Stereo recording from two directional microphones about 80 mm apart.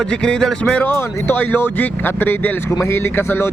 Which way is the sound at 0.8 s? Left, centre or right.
Left.